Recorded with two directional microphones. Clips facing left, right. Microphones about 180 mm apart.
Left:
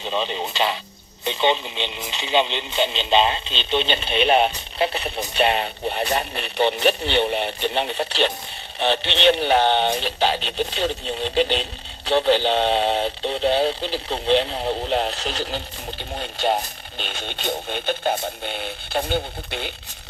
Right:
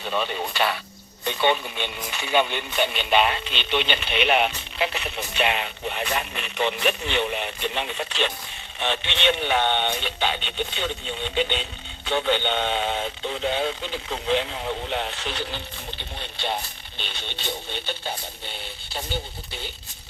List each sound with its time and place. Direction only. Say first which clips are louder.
0.0 s speech: left 2 dB; 25° left (ahead or behind); by 19.7 s 65° left (ahead or behind)